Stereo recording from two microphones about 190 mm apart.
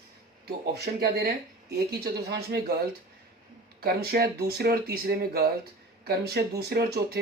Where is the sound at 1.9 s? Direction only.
60° right (ahead or behind).